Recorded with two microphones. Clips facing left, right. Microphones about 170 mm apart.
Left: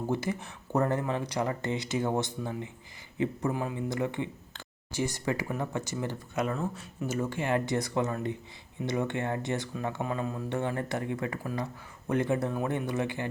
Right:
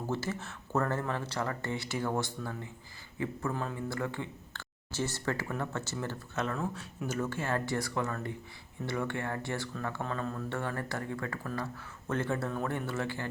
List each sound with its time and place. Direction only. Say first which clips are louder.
0.1 s speech: left 2 dB; 15° left (ahead or behind)
6.6 s speech: left 2 dB; centre (ahead or behind)
7.2 s speech: left 4 dB; 15° left (ahead or behind)